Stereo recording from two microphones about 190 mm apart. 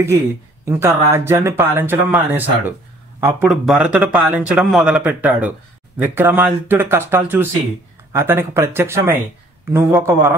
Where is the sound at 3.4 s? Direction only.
Centre (ahead or behind).